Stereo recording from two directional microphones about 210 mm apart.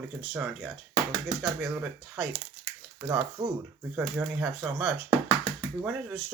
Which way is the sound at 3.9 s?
5° right (ahead or behind).